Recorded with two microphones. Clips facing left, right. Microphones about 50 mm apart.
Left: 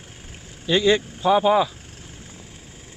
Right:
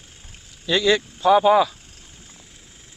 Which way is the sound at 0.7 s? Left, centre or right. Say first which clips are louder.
Left 1 dB; left.